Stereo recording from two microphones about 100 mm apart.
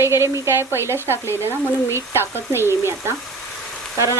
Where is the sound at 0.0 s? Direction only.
25° right (ahead or behind).